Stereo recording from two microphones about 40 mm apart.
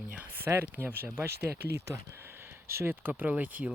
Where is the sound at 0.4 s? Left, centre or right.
Right.